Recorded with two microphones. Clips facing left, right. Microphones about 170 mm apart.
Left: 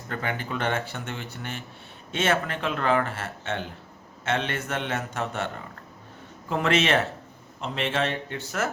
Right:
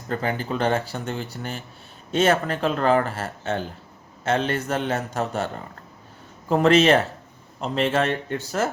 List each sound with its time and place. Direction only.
0.1 s speech: 35° right (ahead or behind)
6.5 s speech: 35° right (ahead or behind)